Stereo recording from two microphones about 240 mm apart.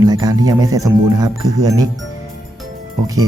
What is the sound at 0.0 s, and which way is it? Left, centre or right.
Speech, centre.